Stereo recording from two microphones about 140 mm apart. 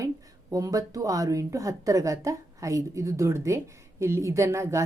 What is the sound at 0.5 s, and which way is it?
A woman's voice, 25° right (ahead or behind).